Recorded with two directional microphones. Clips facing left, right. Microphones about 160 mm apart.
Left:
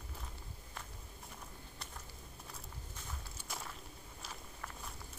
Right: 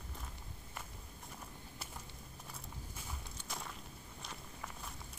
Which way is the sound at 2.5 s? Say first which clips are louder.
Right 3 dB; 10° right (ahead or behind).